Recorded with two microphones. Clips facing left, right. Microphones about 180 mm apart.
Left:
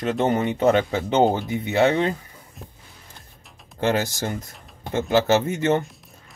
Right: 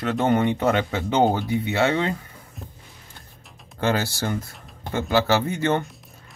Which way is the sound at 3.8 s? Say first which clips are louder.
Left 1 dB; 20° left (ahead or behind).